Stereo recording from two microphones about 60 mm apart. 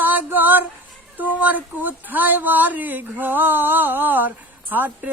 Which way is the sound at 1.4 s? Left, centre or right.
Right.